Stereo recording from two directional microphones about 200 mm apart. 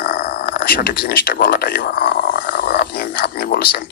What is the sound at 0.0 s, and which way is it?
Speech, 45° left (ahead or behind).